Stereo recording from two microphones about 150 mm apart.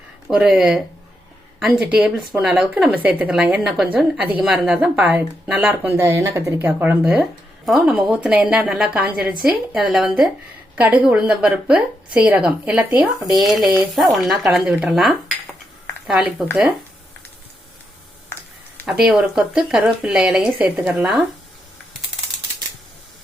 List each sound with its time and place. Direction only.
0.3 s speech: 5° right (ahead or behind)
19.0 s speech: 5° right (ahead or behind)